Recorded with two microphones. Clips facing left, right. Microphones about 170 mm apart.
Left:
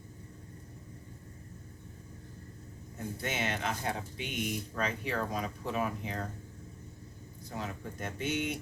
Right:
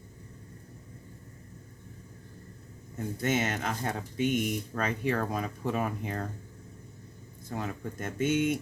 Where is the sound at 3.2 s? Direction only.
45° right (ahead or behind).